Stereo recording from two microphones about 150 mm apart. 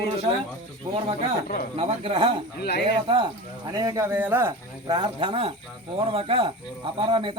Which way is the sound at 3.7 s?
25° right (ahead or behind).